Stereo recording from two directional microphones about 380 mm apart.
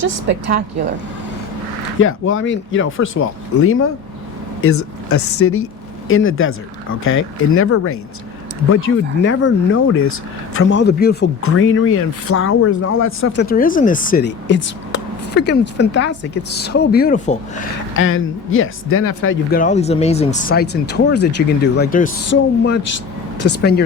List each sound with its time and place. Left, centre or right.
0.0 s a woman's voice: right
2.0 s speech: left